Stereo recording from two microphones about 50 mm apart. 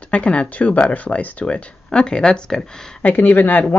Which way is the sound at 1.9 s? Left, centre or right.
Centre.